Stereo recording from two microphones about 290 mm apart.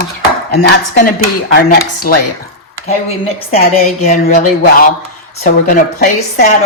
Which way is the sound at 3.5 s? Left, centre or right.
Left.